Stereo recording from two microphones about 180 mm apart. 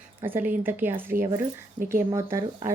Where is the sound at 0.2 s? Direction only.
10° right (ahead or behind).